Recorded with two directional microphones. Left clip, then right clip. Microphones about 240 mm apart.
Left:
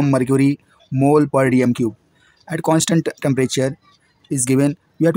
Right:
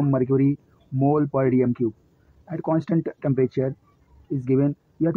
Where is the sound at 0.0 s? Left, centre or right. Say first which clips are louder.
Left 5 dB; left.